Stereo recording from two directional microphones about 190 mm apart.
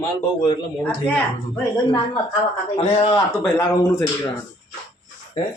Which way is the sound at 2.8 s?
35° left (ahead or behind).